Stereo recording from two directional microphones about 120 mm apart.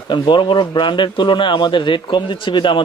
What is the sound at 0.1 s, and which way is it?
A man's voice, 40° left (ahead or behind).